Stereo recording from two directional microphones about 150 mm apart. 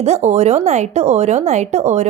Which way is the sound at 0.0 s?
45° right (ahead or behind).